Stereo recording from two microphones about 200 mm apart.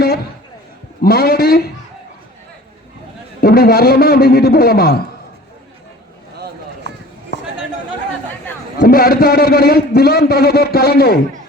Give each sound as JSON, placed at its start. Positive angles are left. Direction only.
{"t": 1.0, "sound": "a man's voice", "side_deg": 50}
{"t": 3.4, "sound": "a man's voice", "side_deg": 50}
{"t": 8.8, "sound": "a man's voice", "side_deg": 50}